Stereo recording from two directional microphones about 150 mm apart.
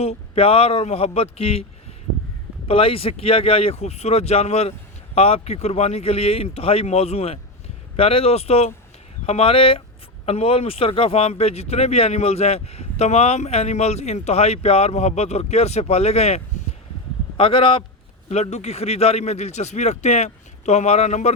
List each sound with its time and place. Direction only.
0.0 s speech: 40° left (ahead or behind)
2.6 s speech: 40° left (ahead or behind)